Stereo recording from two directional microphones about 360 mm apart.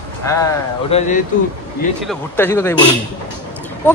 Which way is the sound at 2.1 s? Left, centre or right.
Centre.